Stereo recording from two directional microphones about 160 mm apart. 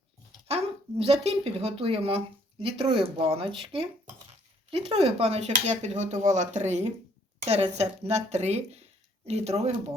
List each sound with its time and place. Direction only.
0.4 s speech: 40° right (ahead or behind)